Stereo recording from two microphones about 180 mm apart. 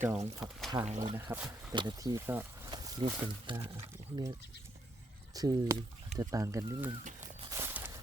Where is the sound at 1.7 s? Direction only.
25° right (ahead or behind).